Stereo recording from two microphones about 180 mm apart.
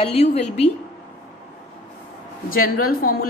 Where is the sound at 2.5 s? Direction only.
55° left (ahead or behind).